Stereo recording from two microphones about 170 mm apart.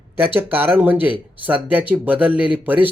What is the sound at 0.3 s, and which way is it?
Speech, 10° right (ahead or behind).